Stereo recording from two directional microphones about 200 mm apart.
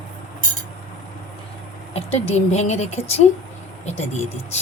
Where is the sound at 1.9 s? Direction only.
30° left (ahead or behind).